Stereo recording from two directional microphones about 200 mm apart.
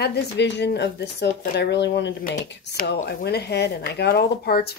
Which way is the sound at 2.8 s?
50° left (ahead or behind).